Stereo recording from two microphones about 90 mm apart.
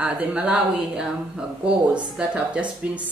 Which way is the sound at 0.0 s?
15° right (ahead or behind).